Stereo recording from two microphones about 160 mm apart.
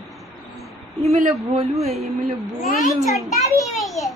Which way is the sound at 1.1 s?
40° right (ahead or behind).